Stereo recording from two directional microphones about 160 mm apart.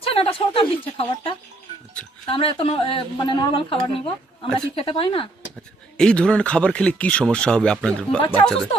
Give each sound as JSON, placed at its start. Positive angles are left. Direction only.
{"t": 0.0, "sound": "speech", "side_deg": 35}
{"t": 6.0, "sound": "speech", "side_deg": 5}